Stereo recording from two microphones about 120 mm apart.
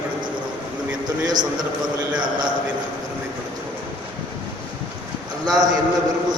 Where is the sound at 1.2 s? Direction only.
35° right (ahead or behind).